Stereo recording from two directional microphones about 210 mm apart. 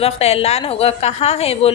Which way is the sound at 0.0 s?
30° left (ahead or behind).